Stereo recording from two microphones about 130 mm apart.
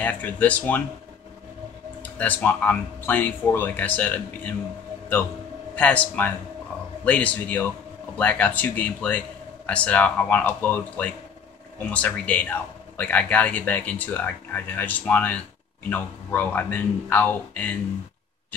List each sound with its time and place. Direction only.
0.0 s a man's voice: 10° left (ahead or behind)
2.1 s a man's voice: 15° left (ahead or behind)
5.8 s a man's voice: 10° left (ahead or behind)